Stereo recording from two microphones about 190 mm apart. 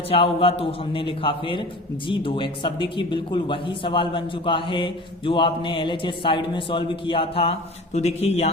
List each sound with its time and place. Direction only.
0.1 s a man's voice: 30° left (ahead or behind)